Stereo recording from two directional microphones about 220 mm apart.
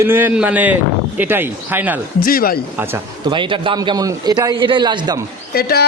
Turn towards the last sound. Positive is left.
turn(degrees=45)  # may be behind; listen again after turning